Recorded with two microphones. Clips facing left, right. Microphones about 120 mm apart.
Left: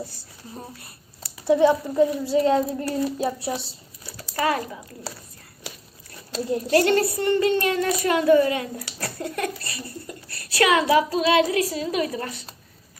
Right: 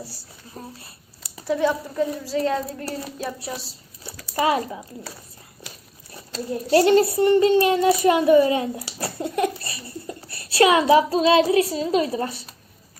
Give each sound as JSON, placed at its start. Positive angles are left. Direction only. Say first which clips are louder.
{"t": 1.5, "sound": "speech", "louder": "left 4 dB", "side_deg": 20}
{"t": 4.4, "sound": "speech", "louder": "right 3 dB", "side_deg": -20}
{"t": 6.7, "sound": "a woman's voice", "louder": "right 4 dB", "side_deg": -20}